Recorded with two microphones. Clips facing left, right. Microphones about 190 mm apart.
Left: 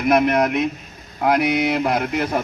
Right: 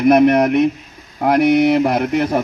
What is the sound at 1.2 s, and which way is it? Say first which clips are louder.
Speech: right 6 dB; 45° right (ahead or behind).